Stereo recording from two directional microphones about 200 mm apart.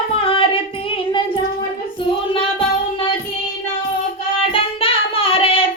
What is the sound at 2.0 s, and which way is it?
Child singing, 25° left (ahead or behind).